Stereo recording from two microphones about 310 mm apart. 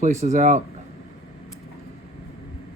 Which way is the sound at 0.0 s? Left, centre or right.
Right.